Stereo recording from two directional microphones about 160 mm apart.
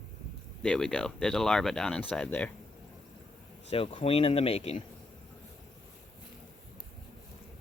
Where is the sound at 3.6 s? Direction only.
35° left (ahead or behind).